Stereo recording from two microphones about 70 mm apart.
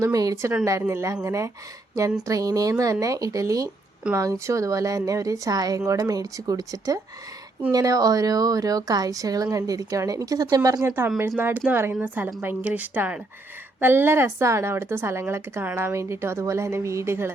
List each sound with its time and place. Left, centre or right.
0.0 s a woman's voice: right
0.6 s a woman's voice: right
10.8 s a woman's voice: right
11.9 s a woman's voice: right